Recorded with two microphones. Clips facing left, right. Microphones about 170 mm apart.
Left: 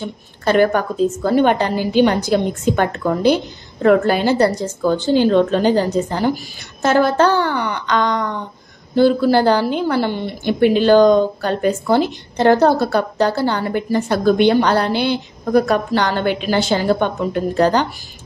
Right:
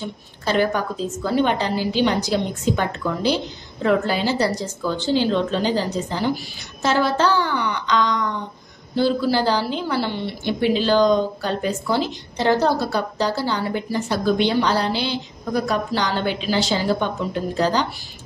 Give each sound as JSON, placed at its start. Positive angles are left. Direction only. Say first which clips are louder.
{"t": 0.5, "sound": "a woman's voice", "louder": "left 6 dB", "side_deg": 55}